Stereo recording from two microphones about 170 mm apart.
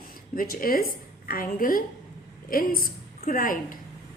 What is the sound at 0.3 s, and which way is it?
A woman's voice, 60° left (ahead or behind).